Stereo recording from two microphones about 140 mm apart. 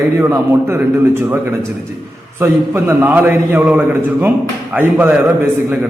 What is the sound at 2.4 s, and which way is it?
A man's voice, 15° right (ahead or behind).